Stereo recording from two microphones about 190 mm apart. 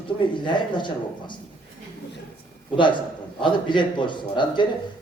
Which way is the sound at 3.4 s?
25° left (ahead or behind).